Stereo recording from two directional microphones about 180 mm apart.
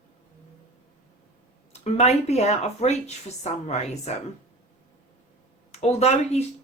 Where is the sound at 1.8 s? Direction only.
40° left (ahead or behind).